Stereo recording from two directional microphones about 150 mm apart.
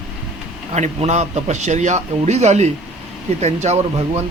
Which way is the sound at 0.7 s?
50° right (ahead or behind).